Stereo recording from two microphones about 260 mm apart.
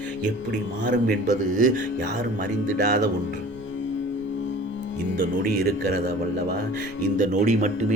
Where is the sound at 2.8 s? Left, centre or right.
Right.